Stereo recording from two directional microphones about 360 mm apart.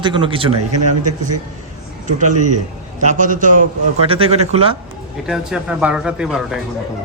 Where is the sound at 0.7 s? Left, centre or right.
Right.